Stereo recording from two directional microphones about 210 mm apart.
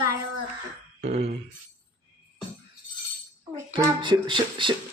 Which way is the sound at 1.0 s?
30° right (ahead or behind).